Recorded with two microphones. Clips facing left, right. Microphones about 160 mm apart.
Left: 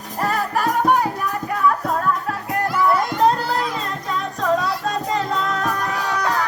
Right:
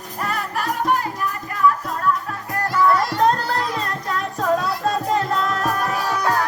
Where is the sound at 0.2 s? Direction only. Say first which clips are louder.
Left 4 dB; 40° left (ahead or behind).